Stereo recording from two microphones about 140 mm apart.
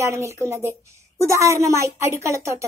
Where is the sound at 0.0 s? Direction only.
20° right (ahead or behind).